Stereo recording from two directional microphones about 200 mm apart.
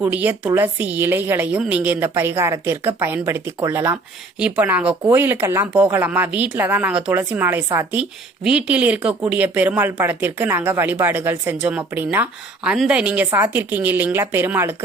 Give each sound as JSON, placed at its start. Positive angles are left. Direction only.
{"t": 0.0, "sound": "speech", "side_deg": -10}